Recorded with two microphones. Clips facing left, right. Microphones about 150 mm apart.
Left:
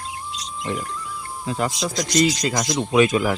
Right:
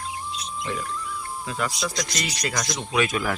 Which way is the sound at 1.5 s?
35° left (ahead or behind).